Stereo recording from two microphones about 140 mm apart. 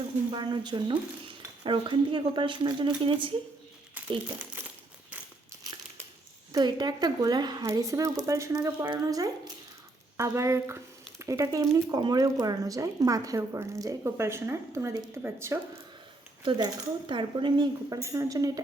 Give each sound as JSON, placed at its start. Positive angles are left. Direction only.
{"t": 0.3, "sound": "a woman's voice", "side_deg": -30}
{"t": 4.6, "sound": "crumpling", "side_deg": -15}
{"t": 6.5, "sound": "speech", "side_deg": -30}
{"t": 16.4, "sound": "a woman's voice", "side_deg": -35}
{"t": 17.8, "sound": "speech", "side_deg": -20}